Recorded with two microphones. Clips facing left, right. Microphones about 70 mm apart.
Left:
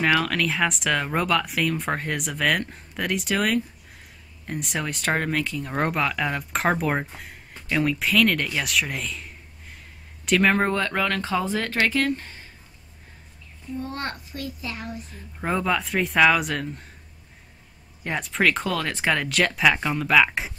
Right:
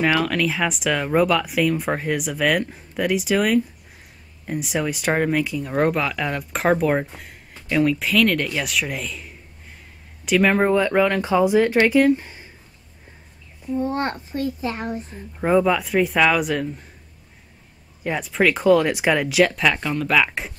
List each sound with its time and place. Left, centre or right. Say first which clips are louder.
0.0 s speech: right 2 dB; centre
13.7 s a woman's voice: right 7 dB; right
15.3 s speech: right 6 dB; centre
18.0 s speech: right 3 dB; centre